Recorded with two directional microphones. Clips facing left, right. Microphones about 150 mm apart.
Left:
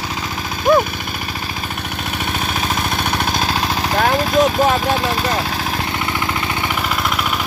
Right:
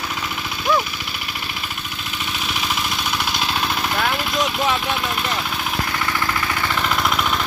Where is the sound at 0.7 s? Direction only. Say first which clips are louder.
Left 7 dB; 50° left (ahead or behind).